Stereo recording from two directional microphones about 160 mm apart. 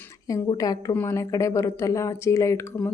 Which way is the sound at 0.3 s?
20° left (ahead or behind).